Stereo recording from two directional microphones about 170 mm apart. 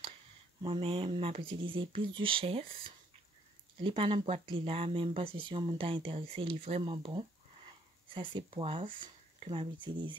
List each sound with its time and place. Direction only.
0.6 s speech: 30° right (ahead or behind)